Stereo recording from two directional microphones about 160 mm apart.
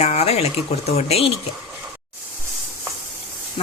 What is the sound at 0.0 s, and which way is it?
Speech, 45° left (ahead or behind).